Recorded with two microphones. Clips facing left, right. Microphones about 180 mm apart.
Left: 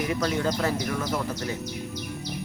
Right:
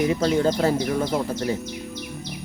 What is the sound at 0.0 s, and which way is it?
Speech, 25° right (ahead or behind).